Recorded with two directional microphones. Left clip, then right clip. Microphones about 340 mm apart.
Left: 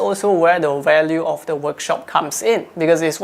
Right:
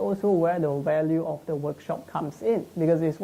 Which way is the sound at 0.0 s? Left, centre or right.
Centre.